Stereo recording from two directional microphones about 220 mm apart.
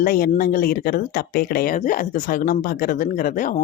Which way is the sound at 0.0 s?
40° left (ahead or behind).